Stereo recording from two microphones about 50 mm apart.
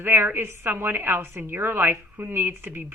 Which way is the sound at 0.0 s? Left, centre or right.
Right.